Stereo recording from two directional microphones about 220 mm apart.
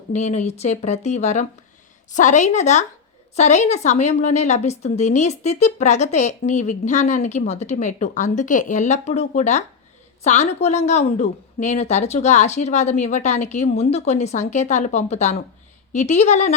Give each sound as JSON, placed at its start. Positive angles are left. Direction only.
{"t": 0.1, "sound": "a woman's voice", "side_deg": 30}